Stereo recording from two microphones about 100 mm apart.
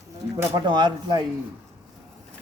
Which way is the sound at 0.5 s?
50° right (ahead or behind).